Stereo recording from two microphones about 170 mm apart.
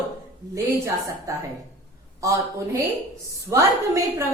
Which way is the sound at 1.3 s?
20° right (ahead or behind).